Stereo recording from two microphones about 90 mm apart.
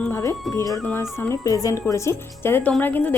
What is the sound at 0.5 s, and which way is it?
A woman's voice, 40° left (ahead or behind).